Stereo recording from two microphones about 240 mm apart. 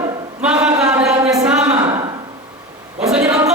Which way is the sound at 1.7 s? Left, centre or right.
Right.